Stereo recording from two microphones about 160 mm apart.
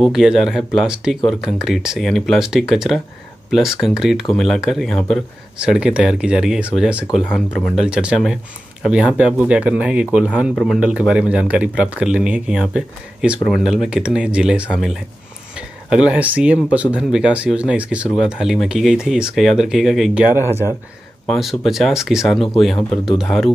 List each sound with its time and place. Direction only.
0.0 s speech: 5° right (ahead or behind)
20.2 s speech: 15° right (ahead or behind)
21.3 s speech: centre (ahead or behind)